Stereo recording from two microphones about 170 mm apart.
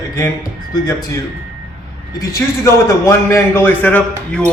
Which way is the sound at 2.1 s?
20° left (ahead or behind).